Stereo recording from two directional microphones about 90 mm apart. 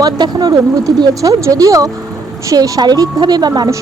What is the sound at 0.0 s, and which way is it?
A woman's voice, 45° right (ahead or behind).